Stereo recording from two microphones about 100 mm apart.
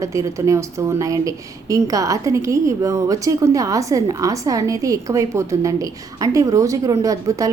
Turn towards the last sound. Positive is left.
turn(degrees=-35)  # may be behind; listen again after turning